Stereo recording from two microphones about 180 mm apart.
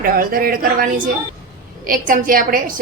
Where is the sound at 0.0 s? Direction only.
55° right (ahead or behind).